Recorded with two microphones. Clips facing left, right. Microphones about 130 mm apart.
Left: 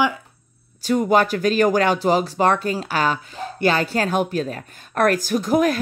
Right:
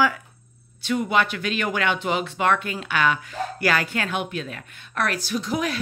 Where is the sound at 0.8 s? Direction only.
40° left (ahead or behind).